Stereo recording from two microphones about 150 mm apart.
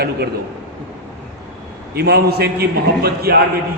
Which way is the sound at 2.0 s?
90° right.